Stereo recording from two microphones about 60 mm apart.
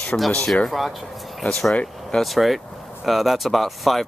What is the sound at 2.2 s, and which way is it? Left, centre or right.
Speech, centre.